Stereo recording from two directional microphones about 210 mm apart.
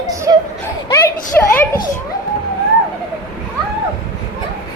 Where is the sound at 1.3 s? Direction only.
10° left (ahead or behind).